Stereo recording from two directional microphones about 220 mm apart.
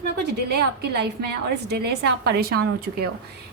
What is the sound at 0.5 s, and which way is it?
A woman's voice, 50° right (ahead or behind).